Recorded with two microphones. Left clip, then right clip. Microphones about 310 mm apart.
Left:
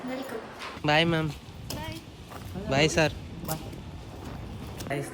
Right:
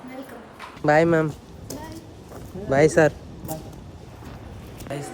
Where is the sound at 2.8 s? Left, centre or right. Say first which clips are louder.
Right 10 dB; centre.